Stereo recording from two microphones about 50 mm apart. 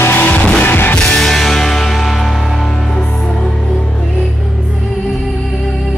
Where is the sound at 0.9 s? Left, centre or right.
Centre.